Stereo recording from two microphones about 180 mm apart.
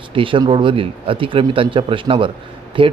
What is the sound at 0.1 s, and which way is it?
Speech, 30° right (ahead or behind).